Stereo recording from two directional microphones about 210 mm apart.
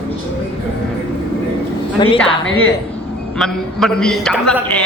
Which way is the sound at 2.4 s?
75° left (ahead or behind).